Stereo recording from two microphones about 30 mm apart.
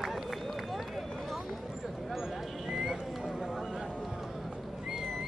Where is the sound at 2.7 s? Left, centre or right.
Right.